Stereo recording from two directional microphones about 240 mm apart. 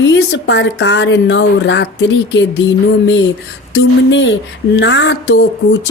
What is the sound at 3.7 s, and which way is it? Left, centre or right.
Speech, left.